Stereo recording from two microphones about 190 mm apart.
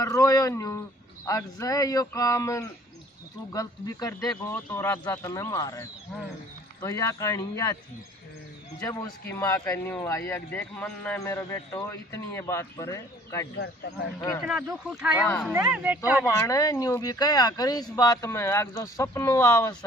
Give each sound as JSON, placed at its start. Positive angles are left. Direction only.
{"t": 0.0, "sound": "a man's voice", "side_deg": 15}
{"t": 6.8, "sound": "a man's voice", "side_deg": 15}
{"t": 8.8, "sound": "a man's voice", "side_deg": 20}
{"t": 14.4, "sound": "speech", "side_deg": 0}
{"t": 16.3, "sound": "a man's voice", "side_deg": 20}